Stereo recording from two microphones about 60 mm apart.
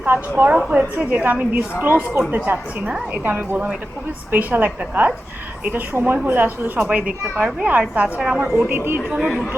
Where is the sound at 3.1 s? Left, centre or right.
Right.